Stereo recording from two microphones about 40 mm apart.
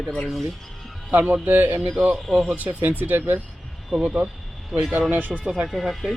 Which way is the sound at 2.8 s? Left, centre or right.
Right.